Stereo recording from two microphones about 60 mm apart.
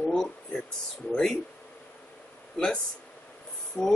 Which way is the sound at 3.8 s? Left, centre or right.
Left.